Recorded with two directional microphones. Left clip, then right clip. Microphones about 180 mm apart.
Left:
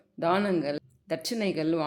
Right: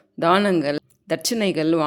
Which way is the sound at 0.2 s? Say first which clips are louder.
Right 8 dB; 30° right (ahead or behind).